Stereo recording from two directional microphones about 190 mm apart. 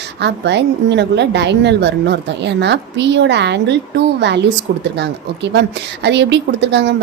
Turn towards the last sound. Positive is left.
turn(degrees=-65)  # may be behind; listen again after turning